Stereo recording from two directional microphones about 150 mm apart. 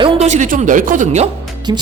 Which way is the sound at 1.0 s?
45° right (ahead or behind).